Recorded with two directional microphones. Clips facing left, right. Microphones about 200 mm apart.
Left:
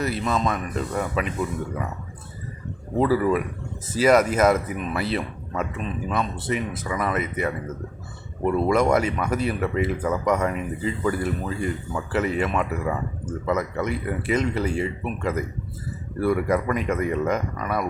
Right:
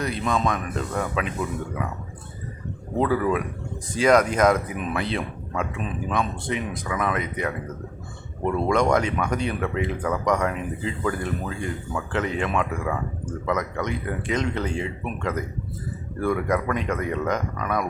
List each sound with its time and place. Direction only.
0.0 s speech: 5° left (ahead or behind)
3.0 s speech: 5° left (ahead or behind)